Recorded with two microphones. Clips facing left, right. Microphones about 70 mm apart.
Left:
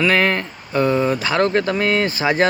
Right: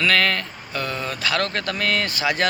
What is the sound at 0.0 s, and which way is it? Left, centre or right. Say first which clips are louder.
Speech: left 3 dB; left.